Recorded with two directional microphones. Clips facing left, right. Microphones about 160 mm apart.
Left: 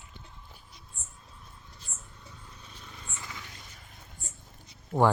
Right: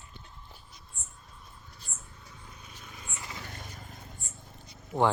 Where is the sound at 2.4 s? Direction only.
10° right (ahead or behind).